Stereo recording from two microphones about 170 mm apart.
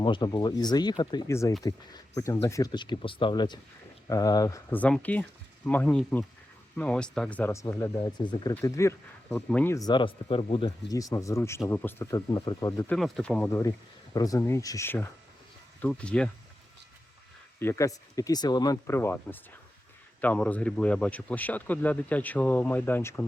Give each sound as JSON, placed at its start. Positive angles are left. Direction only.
{"t": 0.0, "sound": "speech", "side_deg": 25}
{"t": 9.7, "sound": "speech", "side_deg": 25}
{"t": 12.9, "sound": "speech", "side_deg": 5}
{"t": 17.6, "sound": "speech", "side_deg": 15}